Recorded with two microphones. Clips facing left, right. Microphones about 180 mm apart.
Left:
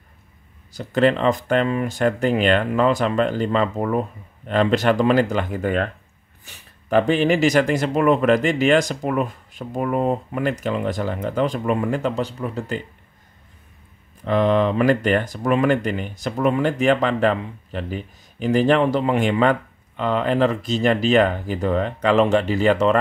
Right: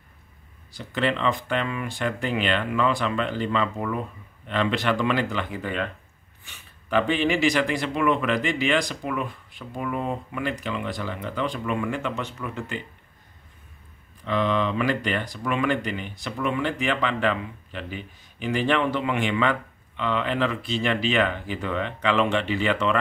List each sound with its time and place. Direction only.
0.7 s speech: 45° left (ahead or behind)
14.2 s speech: 45° left (ahead or behind)